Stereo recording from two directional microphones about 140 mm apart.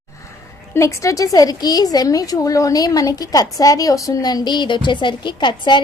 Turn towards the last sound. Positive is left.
turn(degrees=35)  # may be behind; listen again after turning